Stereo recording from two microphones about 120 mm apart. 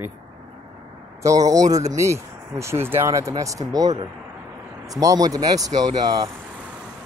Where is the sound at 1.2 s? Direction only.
30° right (ahead or behind).